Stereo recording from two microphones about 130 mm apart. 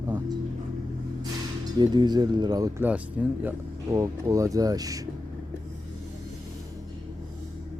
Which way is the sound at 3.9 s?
25° right (ahead or behind).